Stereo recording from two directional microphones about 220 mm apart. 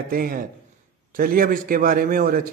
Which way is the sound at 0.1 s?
40° right (ahead or behind).